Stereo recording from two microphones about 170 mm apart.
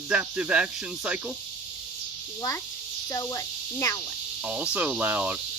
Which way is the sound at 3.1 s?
20° left (ahead or behind).